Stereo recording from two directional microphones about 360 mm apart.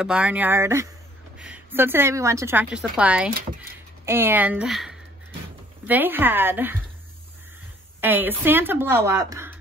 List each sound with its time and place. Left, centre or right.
0.0 s a woman's voice: centre
8.0 s a woman's voice: centre